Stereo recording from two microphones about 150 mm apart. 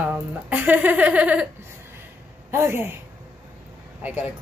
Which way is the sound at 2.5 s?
15° right (ahead or behind).